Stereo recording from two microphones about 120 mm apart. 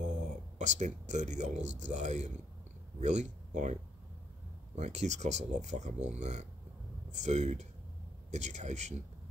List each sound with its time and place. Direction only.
0.6 s a man's voice: 80° right
4.7 s speech: 75° right (ahead or behind)